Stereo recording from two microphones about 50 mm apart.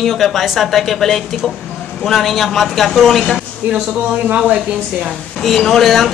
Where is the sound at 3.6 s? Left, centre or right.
Right.